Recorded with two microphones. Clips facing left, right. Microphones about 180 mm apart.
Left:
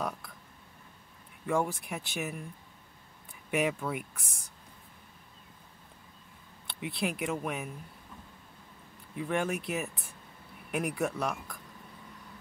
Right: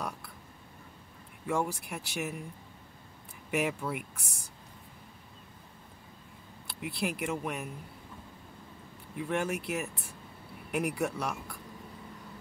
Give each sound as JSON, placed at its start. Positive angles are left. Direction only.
{"t": 1.4, "sound": "speech", "side_deg": 0}
{"t": 3.4, "sound": "speech", "side_deg": 0}
{"t": 6.7, "sound": "speech", "side_deg": 0}
{"t": 9.1, "sound": "speech", "side_deg": 0}